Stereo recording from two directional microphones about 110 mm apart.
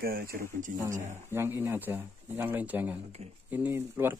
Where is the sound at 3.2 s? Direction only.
70° right (ahead or behind).